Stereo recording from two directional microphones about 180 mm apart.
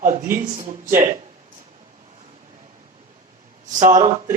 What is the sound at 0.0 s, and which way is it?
Speech, 45° right (ahead or behind).